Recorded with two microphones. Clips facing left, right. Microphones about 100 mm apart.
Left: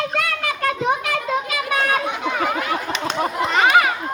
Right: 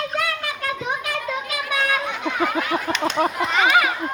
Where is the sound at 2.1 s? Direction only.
15° left (ahead or behind).